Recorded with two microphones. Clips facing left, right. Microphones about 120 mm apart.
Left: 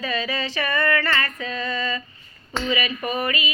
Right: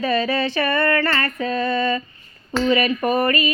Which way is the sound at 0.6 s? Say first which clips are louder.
Right 1 dB; 35° right (ahead or behind).